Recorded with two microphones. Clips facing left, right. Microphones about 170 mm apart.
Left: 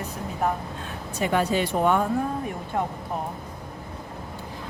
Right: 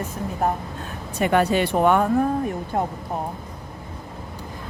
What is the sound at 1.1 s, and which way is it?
Speech, 60° right (ahead or behind).